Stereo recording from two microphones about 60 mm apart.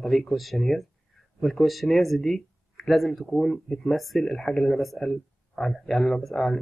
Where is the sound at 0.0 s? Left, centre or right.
Centre.